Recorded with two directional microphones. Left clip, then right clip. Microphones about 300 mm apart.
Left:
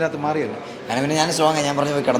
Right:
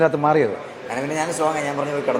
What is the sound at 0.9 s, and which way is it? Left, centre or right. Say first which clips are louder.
Speech: left 3 dB; left.